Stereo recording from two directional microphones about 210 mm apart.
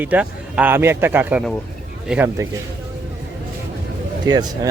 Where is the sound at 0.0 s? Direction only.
5° right (ahead or behind).